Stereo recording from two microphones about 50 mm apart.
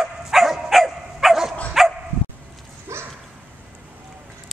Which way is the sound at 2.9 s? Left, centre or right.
Right.